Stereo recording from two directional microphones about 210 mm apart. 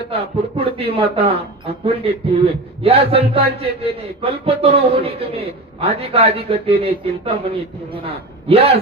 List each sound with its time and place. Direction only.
0.1 s speech: 30° right (ahead or behind)